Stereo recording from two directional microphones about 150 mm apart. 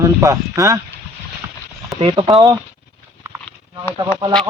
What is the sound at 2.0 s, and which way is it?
Speech, 40° right (ahead or behind).